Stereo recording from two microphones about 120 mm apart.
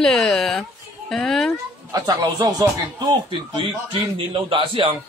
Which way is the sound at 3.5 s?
45° right (ahead or behind).